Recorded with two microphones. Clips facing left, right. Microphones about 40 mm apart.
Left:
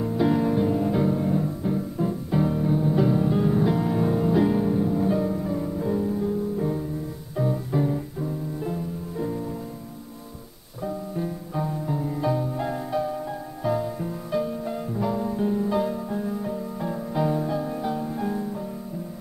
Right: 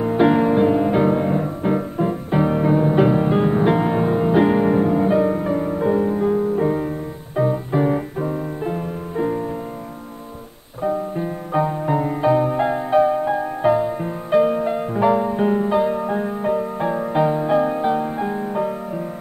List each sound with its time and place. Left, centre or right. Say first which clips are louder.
0.0 s music: right 7 dB; right
7.9 s music: right 7 dB; right
10.8 s music: right 7 dB; right
12.2 s music: right 9 dB; right
15.7 s music: right 7 dB; right
16.0 s music: right 7 dB; right
17.5 s music: right 9 dB; right